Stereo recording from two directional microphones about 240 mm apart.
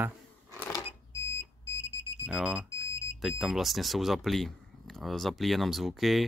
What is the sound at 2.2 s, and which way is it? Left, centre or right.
Speech, centre.